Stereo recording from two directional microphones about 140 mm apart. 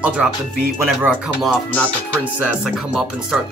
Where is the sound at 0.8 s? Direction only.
5° right (ahead or behind).